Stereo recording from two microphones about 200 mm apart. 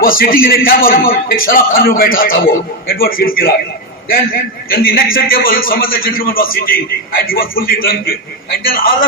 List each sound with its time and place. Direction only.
0.0 s a man's voice: 45° left (ahead or behind)